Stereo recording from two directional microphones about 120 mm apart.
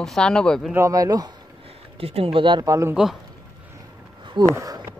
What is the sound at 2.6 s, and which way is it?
Speech, 25° right (ahead or behind).